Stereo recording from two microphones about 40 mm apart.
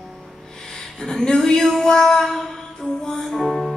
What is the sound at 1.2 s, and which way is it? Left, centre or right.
Speech, centre.